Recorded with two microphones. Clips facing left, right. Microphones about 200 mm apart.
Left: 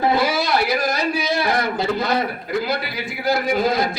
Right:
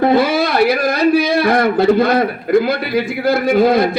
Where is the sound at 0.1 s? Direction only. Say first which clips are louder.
Right 6 dB; 55° right (ahead or behind).